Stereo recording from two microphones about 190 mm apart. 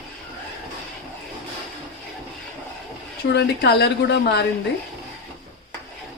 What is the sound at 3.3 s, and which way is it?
Speech, 60° left (ahead or behind).